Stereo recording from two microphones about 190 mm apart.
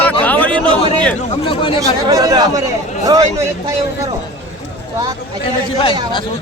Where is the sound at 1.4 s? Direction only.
30° left (ahead or behind).